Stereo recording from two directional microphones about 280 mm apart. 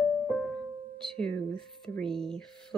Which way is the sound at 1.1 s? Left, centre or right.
Centre.